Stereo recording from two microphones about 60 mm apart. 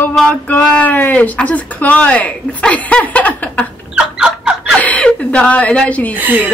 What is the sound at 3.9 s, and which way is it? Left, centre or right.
Fowl, centre.